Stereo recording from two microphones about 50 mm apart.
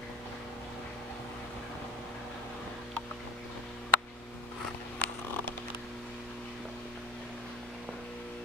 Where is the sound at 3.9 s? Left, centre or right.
Left.